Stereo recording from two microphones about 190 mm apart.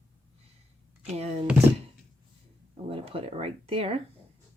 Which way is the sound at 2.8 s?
30° right (ahead or behind).